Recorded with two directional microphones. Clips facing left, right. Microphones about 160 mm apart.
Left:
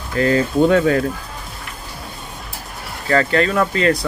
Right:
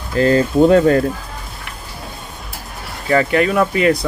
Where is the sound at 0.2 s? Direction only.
35° right (ahead or behind).